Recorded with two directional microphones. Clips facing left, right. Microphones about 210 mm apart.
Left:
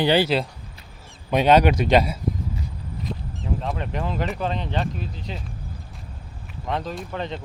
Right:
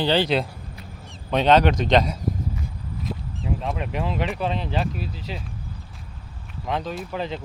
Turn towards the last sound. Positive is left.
turn(degrees=-5)  # may be behind; listen again after turning